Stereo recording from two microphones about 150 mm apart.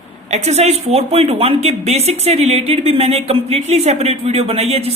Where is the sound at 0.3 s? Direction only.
45° right (ahead or behind).